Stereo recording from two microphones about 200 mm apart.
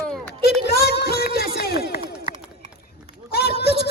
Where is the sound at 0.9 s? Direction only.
55° left (ahead or behind).